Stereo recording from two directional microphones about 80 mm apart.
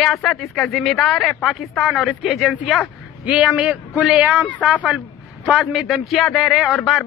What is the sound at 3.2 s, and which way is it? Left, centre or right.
A man's voice, centre.